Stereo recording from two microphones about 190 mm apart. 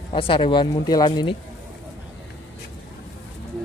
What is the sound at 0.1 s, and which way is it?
Speech, 25° left (ahead or behind).